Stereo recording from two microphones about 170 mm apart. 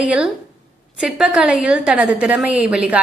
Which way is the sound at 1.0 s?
5° right (ahead or behind).